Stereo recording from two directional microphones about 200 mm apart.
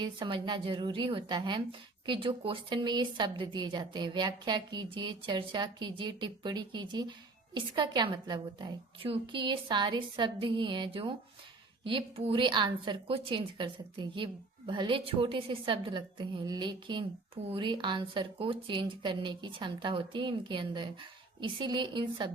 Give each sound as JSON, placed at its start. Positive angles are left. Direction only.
{"t": 0.0, "sound": "speech", "side_deg": -25}